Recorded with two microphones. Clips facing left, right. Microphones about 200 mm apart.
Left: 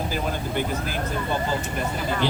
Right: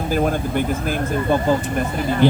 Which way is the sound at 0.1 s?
50° right (ahead or behind).